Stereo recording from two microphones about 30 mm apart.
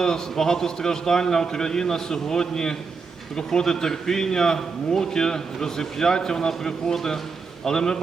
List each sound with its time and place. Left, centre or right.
0.0 s a man's voice: centre